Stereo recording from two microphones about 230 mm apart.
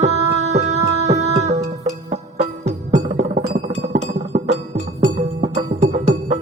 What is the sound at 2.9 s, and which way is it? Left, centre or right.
Music, right.